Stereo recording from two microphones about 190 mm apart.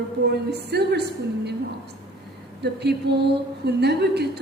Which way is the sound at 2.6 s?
60° right (ahead or behind).